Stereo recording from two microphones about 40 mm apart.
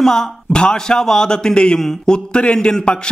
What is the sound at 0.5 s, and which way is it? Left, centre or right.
A man's voice, left.